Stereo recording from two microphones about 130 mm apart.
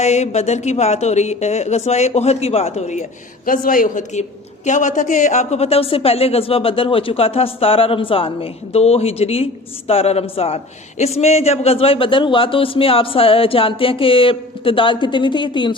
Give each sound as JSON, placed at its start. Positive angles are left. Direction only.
{"t": 0.0, "sound": "speech", "side_deg": 60}